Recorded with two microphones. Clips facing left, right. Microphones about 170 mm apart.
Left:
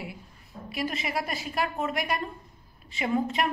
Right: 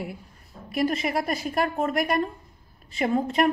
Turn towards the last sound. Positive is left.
turn(degrees=-45)  # may be behind; listen again after turning